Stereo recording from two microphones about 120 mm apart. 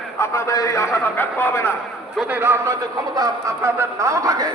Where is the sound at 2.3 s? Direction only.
20° right (ahead or behind).